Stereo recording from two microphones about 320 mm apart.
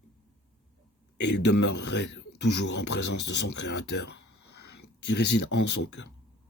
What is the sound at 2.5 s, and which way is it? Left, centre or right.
Speech, left.